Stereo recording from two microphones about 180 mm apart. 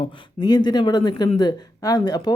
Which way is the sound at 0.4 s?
20° left (ahead or behind).